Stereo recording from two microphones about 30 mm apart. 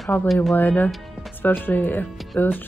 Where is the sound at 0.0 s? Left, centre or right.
Centre.